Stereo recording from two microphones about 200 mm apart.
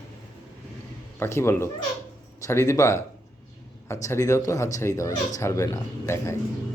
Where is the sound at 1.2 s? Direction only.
10° left (ahead or behind).